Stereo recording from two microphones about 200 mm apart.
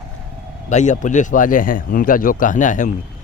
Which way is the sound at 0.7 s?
35° left (ahead or behind).